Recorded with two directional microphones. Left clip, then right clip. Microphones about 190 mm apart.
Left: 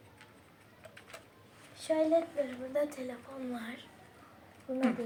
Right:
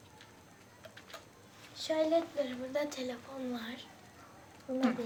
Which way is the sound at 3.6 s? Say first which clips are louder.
Even; 15° right (ahead or behind).